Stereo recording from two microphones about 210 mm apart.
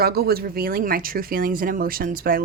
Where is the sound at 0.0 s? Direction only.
45° right (ahead or behind).